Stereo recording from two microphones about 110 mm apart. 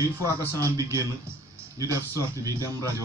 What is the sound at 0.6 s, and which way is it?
Speech, 30° right (ahead or behind).